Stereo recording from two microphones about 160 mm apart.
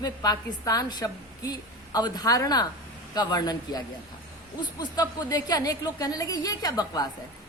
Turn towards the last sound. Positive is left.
turn(degrees=25)  # may be behind; listen again after turning